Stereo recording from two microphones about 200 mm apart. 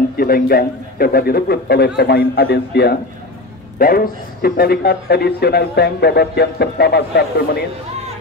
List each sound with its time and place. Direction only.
0.2 s a man's voice: 50° left (ahead or behind)